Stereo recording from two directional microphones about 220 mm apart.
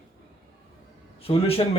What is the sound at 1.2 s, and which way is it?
Speech, 25° left (ahead or behind).